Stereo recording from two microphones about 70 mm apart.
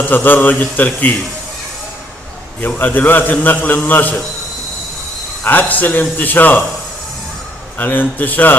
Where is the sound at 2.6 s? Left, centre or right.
Left.